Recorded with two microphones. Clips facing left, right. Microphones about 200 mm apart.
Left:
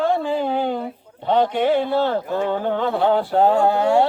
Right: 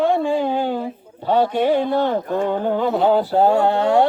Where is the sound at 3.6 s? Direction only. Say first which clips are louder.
Even; 20° right (ahead or behind).